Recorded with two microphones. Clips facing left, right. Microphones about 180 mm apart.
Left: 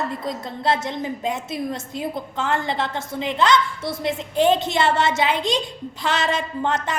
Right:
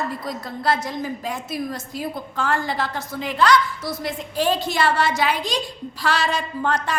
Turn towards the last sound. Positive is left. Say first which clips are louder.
# even
turn(degrees=20)  # may be behind; listen again after turning